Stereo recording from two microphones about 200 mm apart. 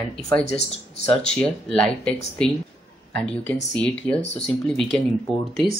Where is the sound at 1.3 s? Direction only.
5° left (ahead or behind).